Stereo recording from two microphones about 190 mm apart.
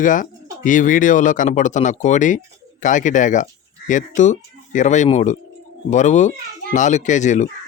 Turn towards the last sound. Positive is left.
turn(degrees=40)  # may be behind; listen again after turning